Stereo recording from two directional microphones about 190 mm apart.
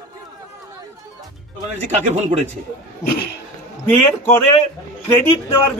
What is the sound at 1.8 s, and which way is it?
Speech, 40° right (ahead or behind).